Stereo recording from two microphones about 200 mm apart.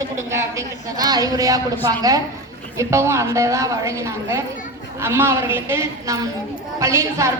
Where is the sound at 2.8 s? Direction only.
15° right (ahead or behind).